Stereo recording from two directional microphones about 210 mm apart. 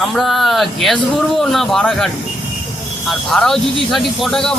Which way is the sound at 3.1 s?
Centre (ahead or behind).